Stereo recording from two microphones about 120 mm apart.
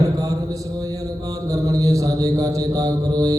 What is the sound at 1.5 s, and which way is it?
Mantra, 30° right (ahead or behind).